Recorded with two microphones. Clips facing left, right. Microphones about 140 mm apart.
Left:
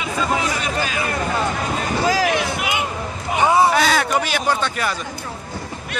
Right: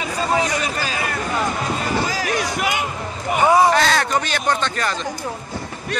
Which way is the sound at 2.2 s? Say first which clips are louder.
Left 1 dB; 40° right (ahead or behind).